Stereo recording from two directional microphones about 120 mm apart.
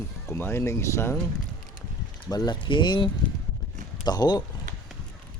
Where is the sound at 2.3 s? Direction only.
35° left (ahead or behind).